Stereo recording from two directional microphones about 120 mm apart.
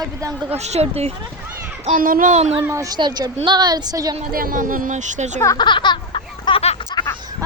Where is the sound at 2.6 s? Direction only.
25° right (ahead or behind).